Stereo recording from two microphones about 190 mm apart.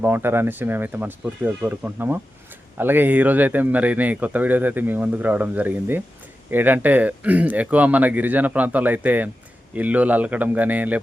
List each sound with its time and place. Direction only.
0.0 s speech: 10° right (ahead or behind)